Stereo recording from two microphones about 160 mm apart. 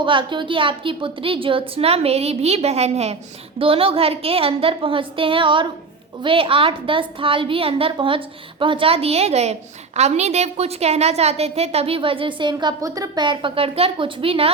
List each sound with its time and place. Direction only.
0.0 s a woman's voice: 30° right (ahead or behind)